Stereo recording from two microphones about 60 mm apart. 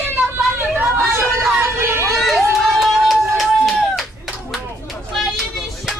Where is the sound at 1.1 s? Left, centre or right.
Right.